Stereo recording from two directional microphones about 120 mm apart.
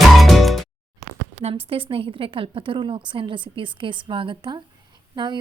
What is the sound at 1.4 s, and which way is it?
A woman's voice, 55° right (ahead or behind).